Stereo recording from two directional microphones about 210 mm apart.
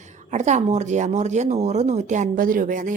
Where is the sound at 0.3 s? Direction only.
35° right (ahead or behind).